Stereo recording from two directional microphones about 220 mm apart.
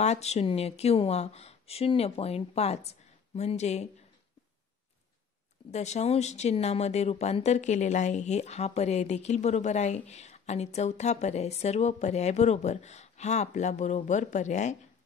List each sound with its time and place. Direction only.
0.0 s speech: 30° left (ahead or behind)
5.7 s speech: 30° left (ahead or behind)